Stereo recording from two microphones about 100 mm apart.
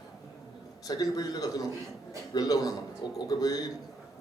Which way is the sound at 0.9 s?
40° left (ahead or behind).